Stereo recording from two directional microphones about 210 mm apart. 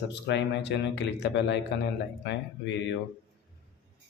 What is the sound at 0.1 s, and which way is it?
A man's voice, 55° left (ahead or behind).